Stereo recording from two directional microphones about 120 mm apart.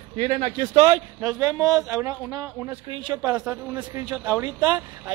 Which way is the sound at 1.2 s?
30° right (ahead or behind).